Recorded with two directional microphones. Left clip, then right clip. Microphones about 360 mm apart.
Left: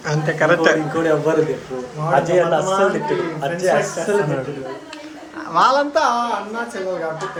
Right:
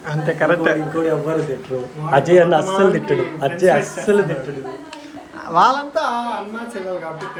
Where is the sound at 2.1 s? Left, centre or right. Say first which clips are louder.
Right 3 dB; right.